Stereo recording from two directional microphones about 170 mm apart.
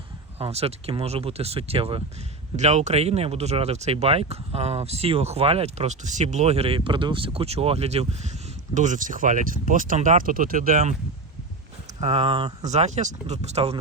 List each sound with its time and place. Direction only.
0.3 s speech: 35° right (ahead or behind)
11.9 s speech: 35° right (ahead or behind)